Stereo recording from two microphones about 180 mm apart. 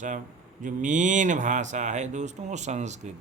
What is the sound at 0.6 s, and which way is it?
Speech, 45° right (ahead or behind).